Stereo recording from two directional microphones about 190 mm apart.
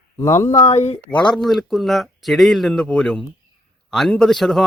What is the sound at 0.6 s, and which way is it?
Speech, 35° left (ahead or behind).